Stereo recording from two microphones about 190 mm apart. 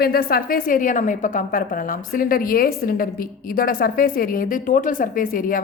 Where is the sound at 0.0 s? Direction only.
55° left (ahead or behind).